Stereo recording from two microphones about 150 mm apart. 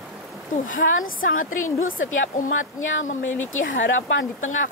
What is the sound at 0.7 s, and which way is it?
Speech, 65° left (ahead or behind).